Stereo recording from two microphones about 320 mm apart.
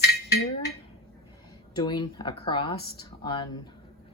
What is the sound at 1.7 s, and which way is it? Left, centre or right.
Speech, centre.